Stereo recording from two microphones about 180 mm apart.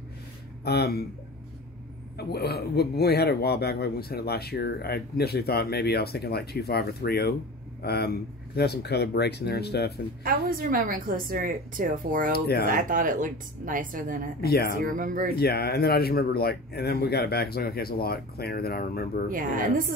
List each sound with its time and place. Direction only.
0.7 s speech: 65° left (ahead or behind)
2.1 s speech: 65° left (ahead or behind)
10.2 s a woman's voice: 50° right (ahead or behind)
12.3 s speech: 60° left (ahead or behind)
12.6 s a woman's voice: 50° right (ahead or behind)
14.4 s speech: 60° left (ahead or behind)
14.9 s a woman's voice: 45° right (ahead or behind)
15.3 s speech: 60° left (ahead or behind)
19.2 s a woman's voice: 50° right (ahead or behind)